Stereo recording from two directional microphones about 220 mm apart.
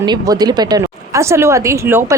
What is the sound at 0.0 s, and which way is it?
A woman's voice, 20° right (ahead or behind).